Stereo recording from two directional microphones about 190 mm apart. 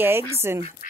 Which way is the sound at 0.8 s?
45° left (ahead or behind).